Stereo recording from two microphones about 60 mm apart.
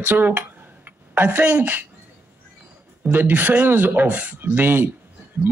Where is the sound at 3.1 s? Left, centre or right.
Right.